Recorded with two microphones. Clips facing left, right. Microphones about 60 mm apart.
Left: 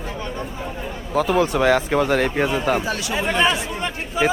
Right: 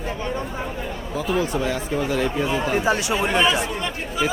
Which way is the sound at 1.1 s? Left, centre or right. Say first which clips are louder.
Left 5 dB; left.